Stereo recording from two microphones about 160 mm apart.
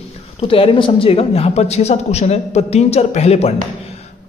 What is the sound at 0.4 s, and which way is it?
A man's voice, 35° left (ahead or behind).